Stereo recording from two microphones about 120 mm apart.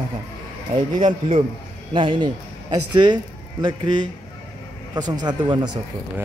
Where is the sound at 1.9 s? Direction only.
45° right (ahead or behind).